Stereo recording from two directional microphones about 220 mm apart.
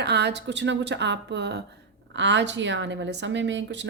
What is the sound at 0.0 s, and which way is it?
Speech, 50° right (ahead or behind).